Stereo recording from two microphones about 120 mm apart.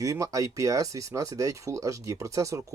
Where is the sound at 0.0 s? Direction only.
25° right (ahead or behind).